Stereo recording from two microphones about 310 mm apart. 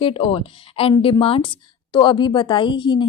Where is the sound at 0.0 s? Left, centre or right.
Centre.